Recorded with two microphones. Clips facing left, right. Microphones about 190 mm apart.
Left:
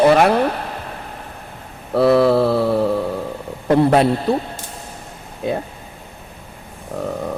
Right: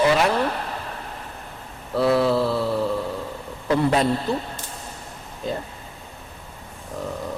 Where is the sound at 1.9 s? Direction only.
65° left (ahead or behind).